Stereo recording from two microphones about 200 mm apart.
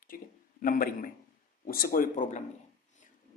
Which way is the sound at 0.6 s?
45° left (ahead or behind).